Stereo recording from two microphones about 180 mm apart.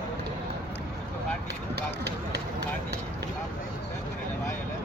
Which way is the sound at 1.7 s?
65° right (ahead or behind).